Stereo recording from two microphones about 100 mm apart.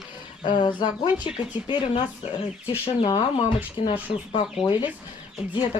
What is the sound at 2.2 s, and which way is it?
Speech, 90° left.